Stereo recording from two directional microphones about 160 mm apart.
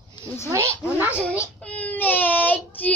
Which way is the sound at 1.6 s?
10° left (ahead or behind).